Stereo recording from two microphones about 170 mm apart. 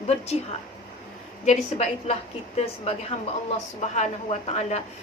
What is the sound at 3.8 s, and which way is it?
A woman's voice, 45° left (ahead or behind).